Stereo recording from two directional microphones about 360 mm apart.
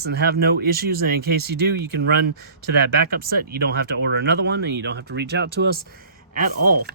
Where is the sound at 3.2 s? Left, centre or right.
Right.